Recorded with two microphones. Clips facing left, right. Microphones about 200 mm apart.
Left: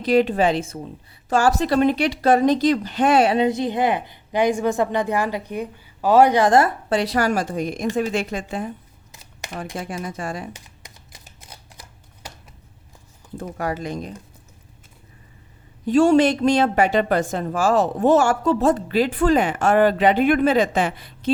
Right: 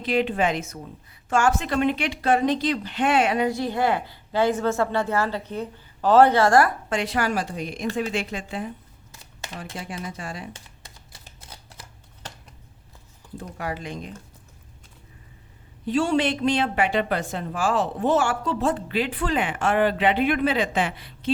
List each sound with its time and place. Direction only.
0.0 s a woman's voice: 40° left (ahead or behind)
3.3 s a woman's voice: 20° left (ahead or behind)
6.9 s a woman's voice: 40° left (ahead or behind)
9.7 s a woman's voice: 45° left (ahead or behind)
10.5 s typewriter: 15° left (ahead or behind)
13.3 s a woman's voice: 45° left (ahead or behind)
15.9 s a woman's voice: 45° left (ahead or behind)